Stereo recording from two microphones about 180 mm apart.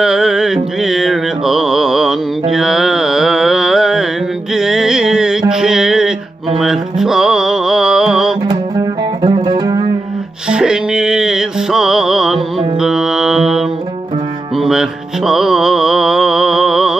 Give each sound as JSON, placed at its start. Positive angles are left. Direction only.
{"t": 0.0, "sound": "music", "side_deg": 0}
{"t": 2.5, "sound": "carnatic music", "side_deg": 0}
{"t": 5.5, "sound": "mantra", "side_deg": -5}
{"t": 6.6, "sound": "music", "side_deg": 0}
{"t": 8.5, "sound": "music", "side_deg": -25}
{"t": 10.5, "sound": "music", "side_deg": -5}
{"t": 12.8, "sound": "mantra", "side_deg": -5}